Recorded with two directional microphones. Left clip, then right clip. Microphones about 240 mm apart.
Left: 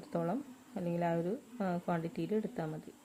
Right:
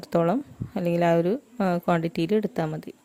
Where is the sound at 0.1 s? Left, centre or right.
Right.